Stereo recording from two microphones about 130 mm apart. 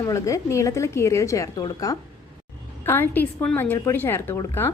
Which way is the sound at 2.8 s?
15° left (ahead or behind).